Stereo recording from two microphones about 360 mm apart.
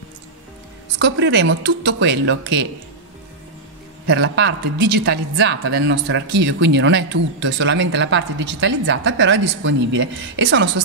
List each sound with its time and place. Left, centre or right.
0.9 s speech: right
4.1 s a woman's voice: right